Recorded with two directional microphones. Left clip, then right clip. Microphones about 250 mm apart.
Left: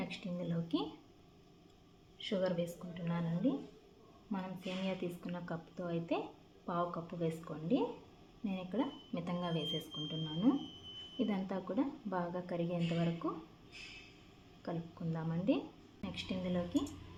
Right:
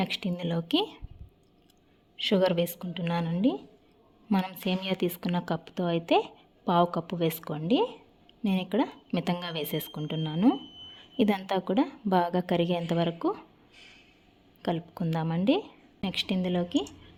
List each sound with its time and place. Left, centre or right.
0.0 s a woman's voice: right
2.1 s a woman's voice: right
14.6 s a woman's voice: right